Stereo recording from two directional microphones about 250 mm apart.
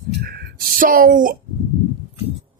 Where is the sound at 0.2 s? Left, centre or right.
Right.